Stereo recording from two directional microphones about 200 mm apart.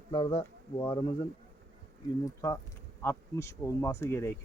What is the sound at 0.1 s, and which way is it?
Speech, 25° left (ahead or behind).